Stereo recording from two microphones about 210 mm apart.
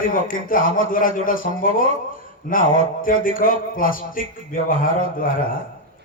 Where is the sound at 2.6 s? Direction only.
30° right (ahead or behind).